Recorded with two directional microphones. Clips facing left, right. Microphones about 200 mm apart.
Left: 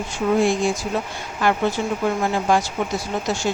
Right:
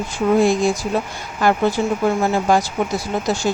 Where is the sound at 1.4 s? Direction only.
40° right (ahead or behind).